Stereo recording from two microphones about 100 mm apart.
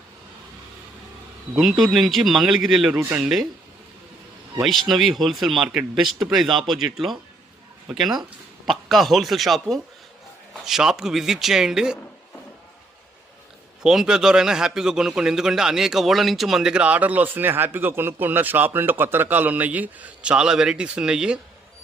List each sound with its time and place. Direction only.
1.5 s speech: centre (ahead or behind)
2.9 s speech: 20° right (ahead or behind)
3.2 s speech: 5° right (ahead or behind)
4.6 s speech: centre (ahead or behind)
13.8 s a man's voice: 5° right (ahead or behind)